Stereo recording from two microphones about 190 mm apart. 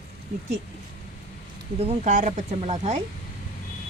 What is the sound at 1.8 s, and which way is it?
Speech, 35° right (ahead or behind).